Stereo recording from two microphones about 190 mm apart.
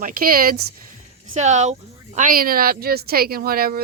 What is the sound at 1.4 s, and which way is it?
Speech, 40° right (ahead or behind).